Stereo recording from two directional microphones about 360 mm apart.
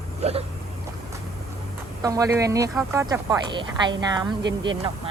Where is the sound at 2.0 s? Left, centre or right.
Centre.